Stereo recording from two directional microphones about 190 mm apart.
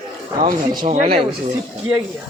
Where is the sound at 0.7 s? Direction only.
30° right (ahead or behind).